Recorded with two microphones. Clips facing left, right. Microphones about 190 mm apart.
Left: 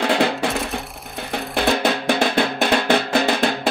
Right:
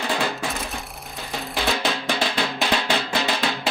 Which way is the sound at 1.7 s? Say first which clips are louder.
Left 6 dB; 55° left (ahead or behind).